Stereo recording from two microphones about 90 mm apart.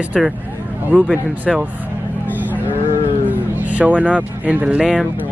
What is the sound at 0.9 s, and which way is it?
Speech, 15° right (ahead or behind).